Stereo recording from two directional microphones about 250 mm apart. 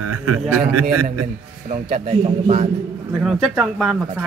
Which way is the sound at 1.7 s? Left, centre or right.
Right.